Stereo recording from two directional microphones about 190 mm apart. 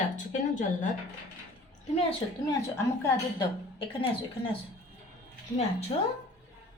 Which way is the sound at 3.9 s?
30° left (ahead or behind).